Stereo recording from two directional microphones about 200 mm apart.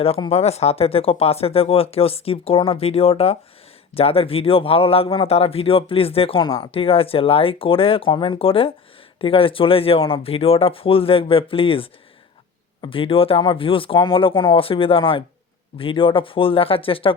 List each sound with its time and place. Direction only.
0.0 s speech: 30° left (ahead or behind)